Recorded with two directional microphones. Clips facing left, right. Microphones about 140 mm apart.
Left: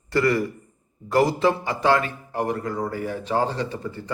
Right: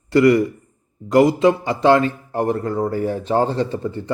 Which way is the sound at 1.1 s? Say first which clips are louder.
Right 6 dB; 20° right (ahead or behind).